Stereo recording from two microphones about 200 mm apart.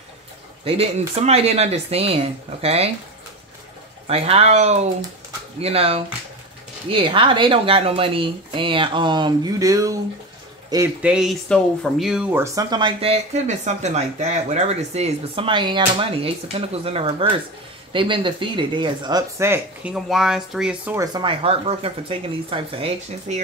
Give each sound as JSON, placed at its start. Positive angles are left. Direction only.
{"t": 0.7, "sound": "speech", "side_deg": -30}
{"t": 4.1, "sound": "speech", "side_deg": -30}
{"t": 11.0, "sound": "speech", "side_deg": -5}
{"t": 21.0, "sound": "speech", "side_deg": -20}